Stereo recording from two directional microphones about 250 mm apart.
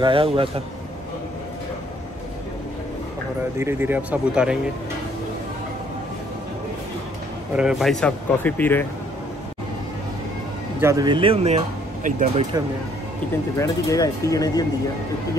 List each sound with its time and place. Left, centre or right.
0.0 s speech: right
3.5 s speech: centre
7.5 s speech: centre
10.8 s speech: centre; by 12.4 s right
13.6 s speech: centre